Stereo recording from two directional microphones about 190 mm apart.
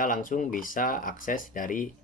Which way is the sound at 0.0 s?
45° left (ahead or behind).